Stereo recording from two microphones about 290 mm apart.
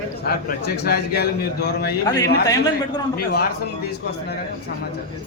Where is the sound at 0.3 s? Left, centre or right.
Left.